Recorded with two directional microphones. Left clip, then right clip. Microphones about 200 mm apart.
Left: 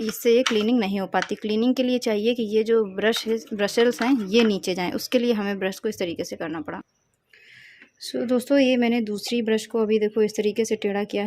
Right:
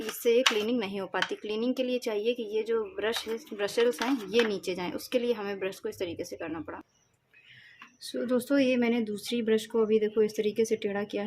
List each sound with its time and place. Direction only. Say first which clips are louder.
0.0 s speech: left 5 dB; 35° left (ahead or behind)
8.0 s speech: left 5 dB; 30° left (ahead or behind)